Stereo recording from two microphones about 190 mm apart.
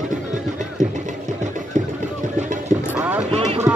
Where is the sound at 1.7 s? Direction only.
40° right (ahead or behind).